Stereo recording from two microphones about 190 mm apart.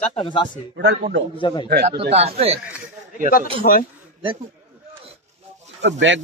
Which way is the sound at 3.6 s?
55° left (ahead or behind).